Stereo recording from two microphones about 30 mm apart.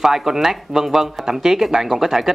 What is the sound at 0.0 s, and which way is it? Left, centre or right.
Speech, centre.